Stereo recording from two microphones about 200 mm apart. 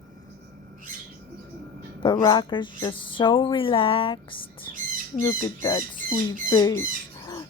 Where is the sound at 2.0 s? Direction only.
20° left (ahead or behind).